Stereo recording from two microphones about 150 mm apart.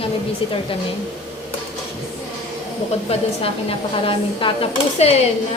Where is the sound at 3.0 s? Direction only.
40° left (ahead or behind).